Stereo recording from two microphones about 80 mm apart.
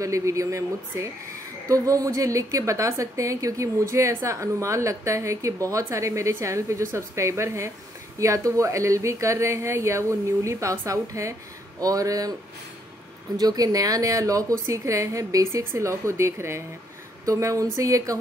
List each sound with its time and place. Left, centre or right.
0.0 s a woman's voice: right
13.4 s a woman's voice: right